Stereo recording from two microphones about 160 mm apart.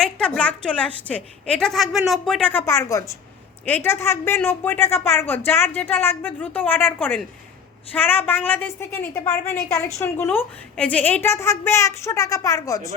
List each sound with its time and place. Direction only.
0.0 s a woman's voice: 5° left (ahead or behind)